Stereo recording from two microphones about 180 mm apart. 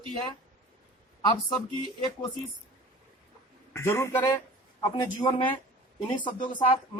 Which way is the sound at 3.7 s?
15° left (ahead or behind).